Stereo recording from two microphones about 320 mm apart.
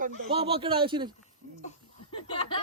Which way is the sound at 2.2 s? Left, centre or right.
Centre.